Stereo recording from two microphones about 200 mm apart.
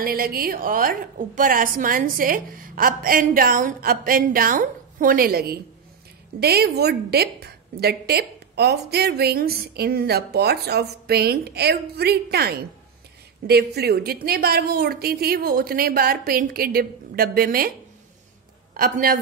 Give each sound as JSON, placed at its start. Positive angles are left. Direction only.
{"t": 0.0, "sound": "a woman's voice", "side_deg": -45}
{"t": 18.8, "sound": "a woman's voice", "side_deg": -45}